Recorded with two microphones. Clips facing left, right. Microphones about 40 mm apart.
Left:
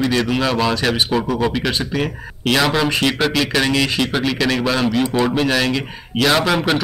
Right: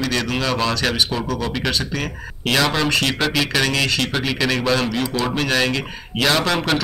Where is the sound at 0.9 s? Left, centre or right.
Left.